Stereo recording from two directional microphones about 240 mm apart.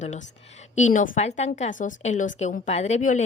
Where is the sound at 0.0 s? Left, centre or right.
Left.